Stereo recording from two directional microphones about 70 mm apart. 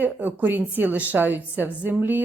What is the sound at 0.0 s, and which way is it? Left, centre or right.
A woman's voice, right.